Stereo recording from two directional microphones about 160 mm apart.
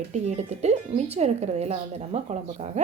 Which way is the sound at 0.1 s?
45° right (ahead or behind).